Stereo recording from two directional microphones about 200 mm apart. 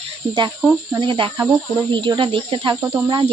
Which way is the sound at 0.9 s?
25° right (ahead or behind).